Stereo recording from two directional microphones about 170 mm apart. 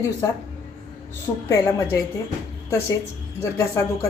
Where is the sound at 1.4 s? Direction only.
20° left (ahead or behind).